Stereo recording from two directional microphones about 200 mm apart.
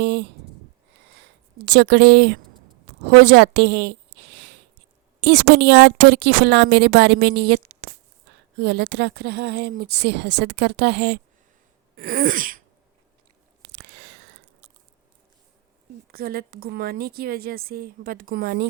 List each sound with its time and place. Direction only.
0.0 s a woman's voice: 55° right (ahead or behind)
11.9 s a woman's voice: 45° right (ahead or behind)
13.6 s chewing: 60° right (ahead or behind)
16.1 s a woman's voice: 50° right (ahead or behind)